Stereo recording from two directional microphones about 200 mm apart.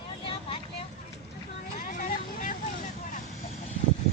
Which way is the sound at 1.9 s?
40° left (ahead or behind).